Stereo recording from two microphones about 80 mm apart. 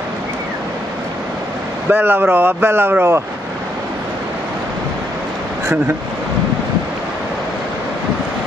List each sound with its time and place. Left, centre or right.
1.9 s speech: right